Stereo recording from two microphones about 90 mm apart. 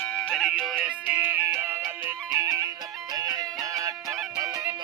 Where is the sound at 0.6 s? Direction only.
15° right (ahead or behind); by 3.9 s 40° right (ahead or behind).